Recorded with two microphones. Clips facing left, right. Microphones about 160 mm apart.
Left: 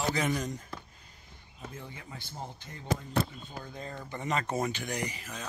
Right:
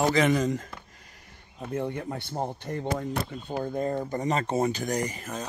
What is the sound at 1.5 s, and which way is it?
Speech, 65° right (ahead or behind).